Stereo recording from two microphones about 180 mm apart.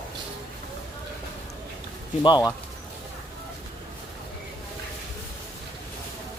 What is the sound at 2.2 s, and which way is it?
Speech, 25° left (ahead or behind).